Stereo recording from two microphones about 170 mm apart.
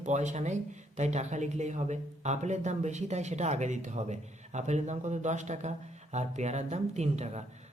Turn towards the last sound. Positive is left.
turn(degrees=-40)  # may be behind; listen again after turning